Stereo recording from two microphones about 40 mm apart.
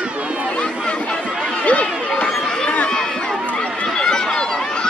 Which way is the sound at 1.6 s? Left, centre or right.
Left.